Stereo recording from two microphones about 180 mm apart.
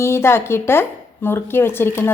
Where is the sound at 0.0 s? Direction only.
15° left (ahead or behind).